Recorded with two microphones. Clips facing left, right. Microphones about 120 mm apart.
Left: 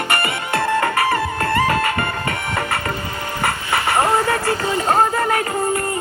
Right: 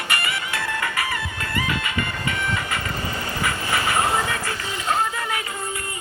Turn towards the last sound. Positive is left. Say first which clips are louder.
# left 10 dB
turn(degrees=50)  # may be behind; listen again after turning